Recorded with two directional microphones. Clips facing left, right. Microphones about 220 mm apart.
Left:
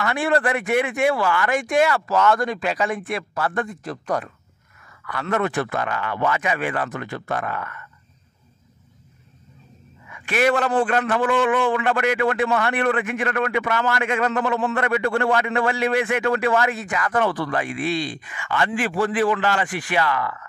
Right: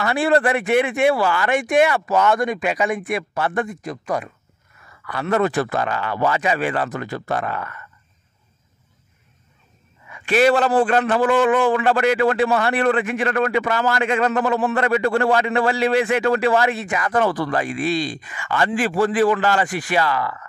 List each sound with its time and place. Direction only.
0.0 s speech: 30° right (ahead or behind); by 4.3 s 10° right (ahead or behind)
5.0 s a man's voice: 30° right (ahead or behind)
10.0 s a man's voice: 30° right (ahead or behind)
17.2 s a man's voice: 40° right (ahead or behind)